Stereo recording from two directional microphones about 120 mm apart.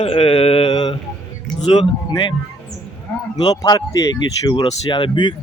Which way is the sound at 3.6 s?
30° left (ahead or behind).